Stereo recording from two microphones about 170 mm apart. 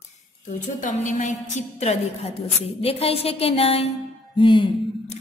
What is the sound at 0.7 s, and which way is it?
A woman's voice, 50° left (ahead or behind).